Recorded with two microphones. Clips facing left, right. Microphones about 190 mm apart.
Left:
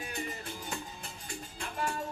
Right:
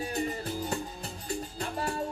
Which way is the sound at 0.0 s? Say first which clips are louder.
Right 7 dB; 35° right (ahead or behind).